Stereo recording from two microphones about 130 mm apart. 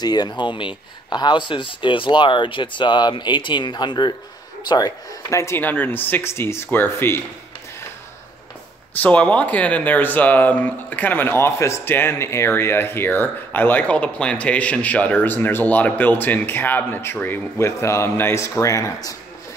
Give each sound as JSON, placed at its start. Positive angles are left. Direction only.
{"t": 0.0, "sound": "speech", "side_deg": 30}
{"t": 9.0, "sound": "speech", "side_deg": 10}